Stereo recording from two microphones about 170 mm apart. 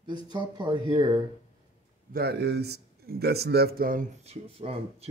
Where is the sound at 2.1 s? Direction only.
70° right (ahead or behind).